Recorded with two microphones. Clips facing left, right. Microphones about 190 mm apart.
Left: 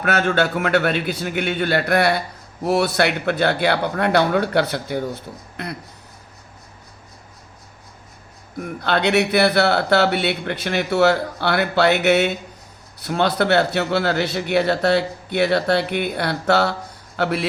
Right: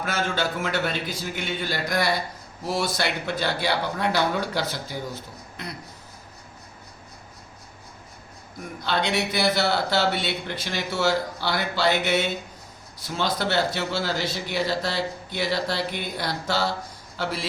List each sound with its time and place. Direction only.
0.0 s a man's voice: 65° left (ahead or behind)
8.8 s a man's voice: 60° left (ahead or behind)